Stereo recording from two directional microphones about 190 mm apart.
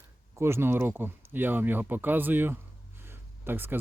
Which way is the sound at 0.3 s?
15° right (ahead or behind).